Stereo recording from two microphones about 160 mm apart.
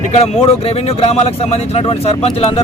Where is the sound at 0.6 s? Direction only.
35° left (ahead or behind).